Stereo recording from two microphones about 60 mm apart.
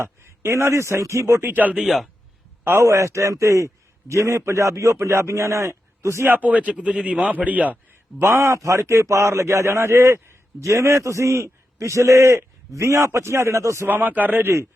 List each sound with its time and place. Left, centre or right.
0.0 s a man's voice: right
1.5 s a man's voice: right
1.8 s a man's voice: centre
2.8 s a man's voice: right
6.3 s a man's voice: right
8.2 s a man's voice: right
13.8 s a man's voice: right